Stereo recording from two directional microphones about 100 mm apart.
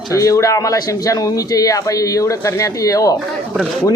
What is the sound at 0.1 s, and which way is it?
Speech, 35° left (ahead or behind).